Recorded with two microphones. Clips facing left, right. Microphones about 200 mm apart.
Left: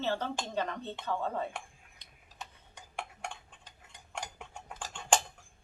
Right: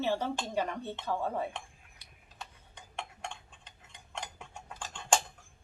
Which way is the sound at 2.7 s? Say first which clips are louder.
Left 1 dB; 10° left (ahead or behind).